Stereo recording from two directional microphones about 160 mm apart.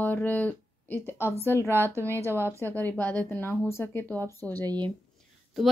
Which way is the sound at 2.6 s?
10° left (ahead or behind).